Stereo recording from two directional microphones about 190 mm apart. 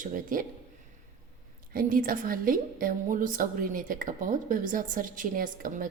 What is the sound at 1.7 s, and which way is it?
A woman's voice, 50° right (ahead or behind).